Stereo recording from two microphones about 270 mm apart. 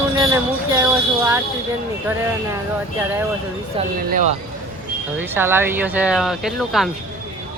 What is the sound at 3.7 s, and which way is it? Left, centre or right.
Speech, right.